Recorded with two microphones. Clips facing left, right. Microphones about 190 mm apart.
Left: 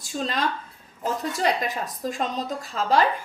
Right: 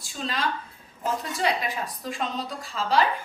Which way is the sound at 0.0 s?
45° left (ahead or behind).